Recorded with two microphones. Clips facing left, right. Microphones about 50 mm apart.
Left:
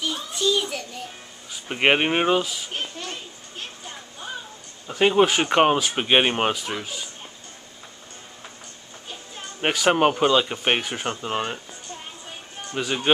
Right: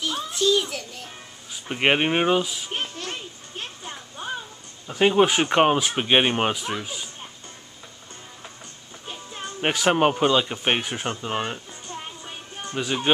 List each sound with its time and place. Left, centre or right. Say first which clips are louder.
0.0 s a sound: right 1 dB; centre
1.7 s speech: left 1 dB; centre
2.4 s a child's voice: right 1 dB; centre
4.2 s a sound: right 3 dB; right
4.8 s speech: even; centre
9.6 s speech: left 1 dB; centre
12.7 s speech: even; centre